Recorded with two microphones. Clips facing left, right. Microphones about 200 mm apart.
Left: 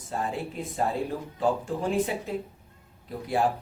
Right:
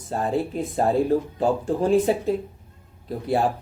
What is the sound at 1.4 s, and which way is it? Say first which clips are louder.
Speech: right 5 dB; 35° right (ahead or behind).